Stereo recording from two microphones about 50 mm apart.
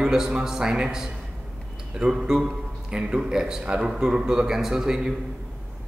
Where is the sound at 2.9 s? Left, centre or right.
Centre.